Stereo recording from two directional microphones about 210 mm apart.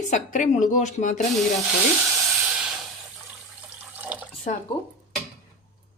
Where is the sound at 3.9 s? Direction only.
5° right (ahead or behind).